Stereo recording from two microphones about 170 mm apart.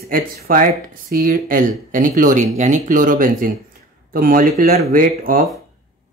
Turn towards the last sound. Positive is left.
turn(degrees=-55)  # may be behind; listen again after turning